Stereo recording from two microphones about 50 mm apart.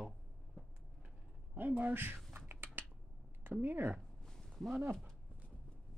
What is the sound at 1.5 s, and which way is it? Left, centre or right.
Speech, right.